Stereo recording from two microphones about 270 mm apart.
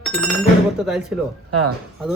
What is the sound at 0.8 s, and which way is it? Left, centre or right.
Speech, centre.